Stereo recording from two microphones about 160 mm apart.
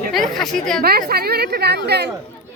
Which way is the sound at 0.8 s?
75° right (ahead or behind).